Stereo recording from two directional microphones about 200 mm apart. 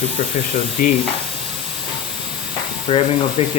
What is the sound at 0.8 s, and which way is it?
Speech, 45° left (ahead or behind).